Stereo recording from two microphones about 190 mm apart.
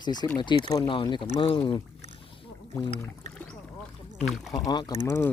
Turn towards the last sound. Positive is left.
turn(degrees=10)  # may be behind; listen again after turning